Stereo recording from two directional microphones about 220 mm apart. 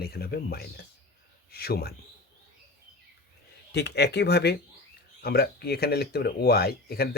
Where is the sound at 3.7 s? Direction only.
50° left (ahead or behind).